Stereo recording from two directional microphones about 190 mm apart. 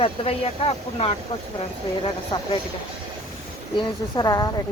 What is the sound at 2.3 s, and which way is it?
Speech, 25° left (ahead or behind).